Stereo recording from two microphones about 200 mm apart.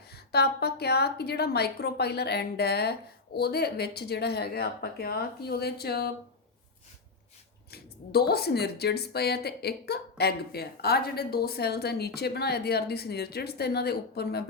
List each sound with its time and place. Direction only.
0.1 s speech: 55° left (ahead or behind)
7.7 s speech: 50° left (ahead or behind)